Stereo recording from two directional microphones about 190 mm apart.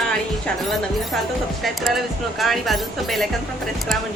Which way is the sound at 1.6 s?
Centre (ahead or behind).